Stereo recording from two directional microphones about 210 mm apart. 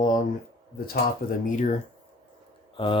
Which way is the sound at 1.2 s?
45° left (ahead or behind).